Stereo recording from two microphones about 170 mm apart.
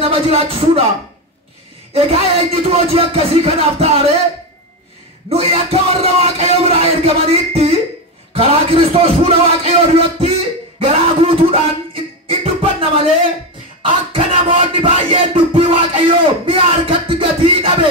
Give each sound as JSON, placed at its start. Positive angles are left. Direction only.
{"t": 0.0, "sound": "music", "side_deg": -35}
{"t": 2.0, "sound": "music", "side_deg": -35}
{"t": 5.3, "sound": "music", "side_deg": -35}